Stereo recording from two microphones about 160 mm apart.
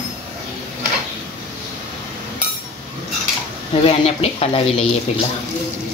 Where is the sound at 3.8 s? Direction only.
40° left (ahead or behind).